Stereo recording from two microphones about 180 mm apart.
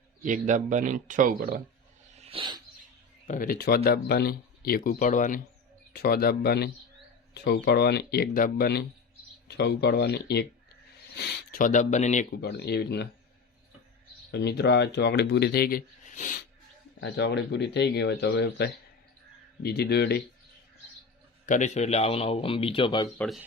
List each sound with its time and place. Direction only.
0.2 s a man's voice: 45° right (ahead or behind)
2.1 s dog: 30° right (ahead or behind)
3.2 s speech: 50° left (ahead or behind)
5.9 s speech: 55° left (ahead or behind); by 12.2 s 40° left (ahead or behind)
12.4 s speech: 65° left (ahead or behind)
14.3 s speech: 70° left (ahead or behind); by 16.3 s 45° left (ahead or behind)
17.0 s speech: 70° left (ahead or behind)
21.4 s speech: 45° left (ahead or behind); by 23.0 s 30° left (ahead or behind)
23.1 s speech: 5° left (ahead or behind)